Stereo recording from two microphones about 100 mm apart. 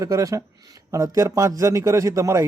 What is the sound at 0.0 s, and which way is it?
Speech, 35° right (ahead or behind).